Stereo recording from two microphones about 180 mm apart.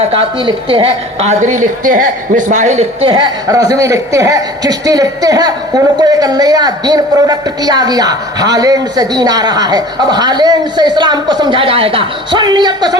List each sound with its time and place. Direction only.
0.0 s a woman's voice: 30° right (ahead or behind)